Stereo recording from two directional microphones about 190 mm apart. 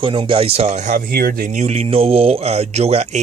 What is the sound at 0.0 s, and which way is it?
Speech, 25° right (ahead or behind).